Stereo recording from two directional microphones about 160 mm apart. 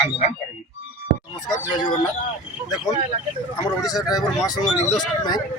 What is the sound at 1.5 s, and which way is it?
Speech, 25° left (ahead or behind).